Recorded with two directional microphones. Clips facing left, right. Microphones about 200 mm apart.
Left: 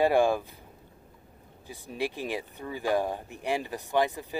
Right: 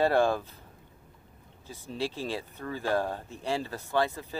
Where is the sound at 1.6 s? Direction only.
15° left (ahead or behind).